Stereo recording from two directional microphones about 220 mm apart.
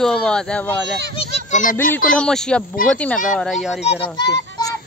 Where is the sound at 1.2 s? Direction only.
35° left (ahead or behind).